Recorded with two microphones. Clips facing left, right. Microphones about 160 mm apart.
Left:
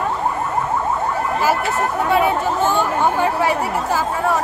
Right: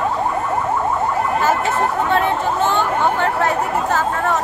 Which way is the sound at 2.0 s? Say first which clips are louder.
Left 1 dB; 10° left (ahead or behind).